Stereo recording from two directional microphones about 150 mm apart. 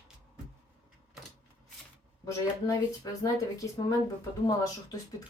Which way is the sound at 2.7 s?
20° left (ahead or behind).